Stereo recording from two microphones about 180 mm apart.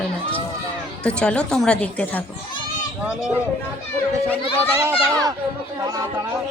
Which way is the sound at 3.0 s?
5° right (ahead or behind).